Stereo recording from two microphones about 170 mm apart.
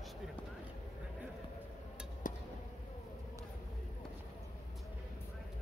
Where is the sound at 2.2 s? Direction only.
50° left (ahead or behind).